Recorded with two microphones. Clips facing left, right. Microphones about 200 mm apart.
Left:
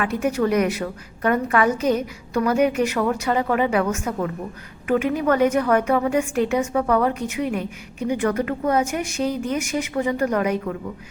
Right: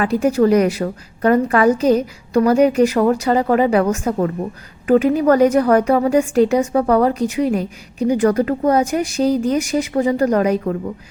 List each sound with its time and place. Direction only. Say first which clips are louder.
0.0 s a woman's voice: right 6 dB; 30° right (ahead or behind)